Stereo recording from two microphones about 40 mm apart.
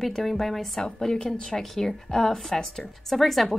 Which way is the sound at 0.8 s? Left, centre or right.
Centre.